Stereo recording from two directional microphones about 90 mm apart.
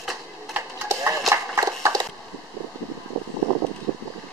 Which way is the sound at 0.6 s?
30° right (ahead or behind).